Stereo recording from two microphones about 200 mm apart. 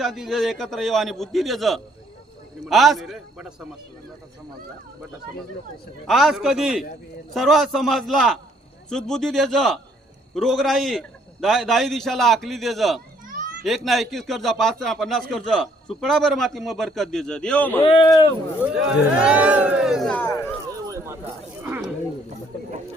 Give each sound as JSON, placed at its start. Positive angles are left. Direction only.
{"t": 0.0, "sound": "speech", "side_deg": 0}
{"t": 6.1, "sound": "speech", "side_deg": 0}
{"t": 17.8, "sound": "speech", "side_deg": 25}
{"t": 18.6, "sound": "speech", "side_deg": -5}
{"t": 20.7, "sound": "a sound", "side_deg": -15}